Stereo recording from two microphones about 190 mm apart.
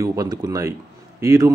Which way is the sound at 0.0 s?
20° right (ahead or behind).